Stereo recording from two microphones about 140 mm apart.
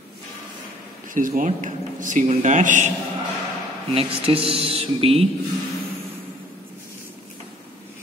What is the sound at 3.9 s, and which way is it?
Speech, 45° right (ahead or behind).